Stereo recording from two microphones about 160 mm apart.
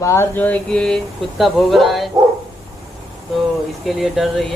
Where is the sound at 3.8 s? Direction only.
Centre (ahead or behind).